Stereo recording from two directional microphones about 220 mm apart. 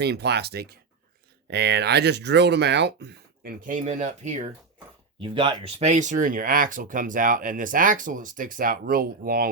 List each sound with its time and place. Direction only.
0.0 s speech: 50° right (ahead or behind)